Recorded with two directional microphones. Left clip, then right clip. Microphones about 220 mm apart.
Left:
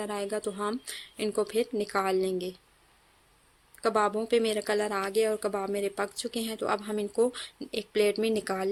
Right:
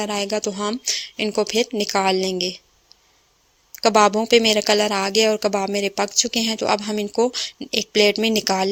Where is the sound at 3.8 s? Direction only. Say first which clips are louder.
Right 11 dB; 35° right (ahead or behind).